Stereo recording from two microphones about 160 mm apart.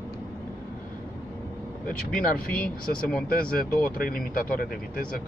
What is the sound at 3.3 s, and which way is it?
Speech, 65° left (ahead or behind).